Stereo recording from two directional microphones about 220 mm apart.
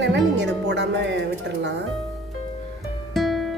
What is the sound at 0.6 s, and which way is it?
Speech, 55° right (ahead or behind).